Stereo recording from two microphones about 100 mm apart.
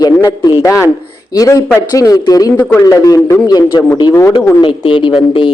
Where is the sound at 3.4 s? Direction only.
45° left (ahead or behind).